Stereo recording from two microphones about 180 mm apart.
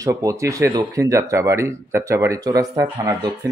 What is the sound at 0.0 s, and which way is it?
Speech, 20° right (ahead or behind).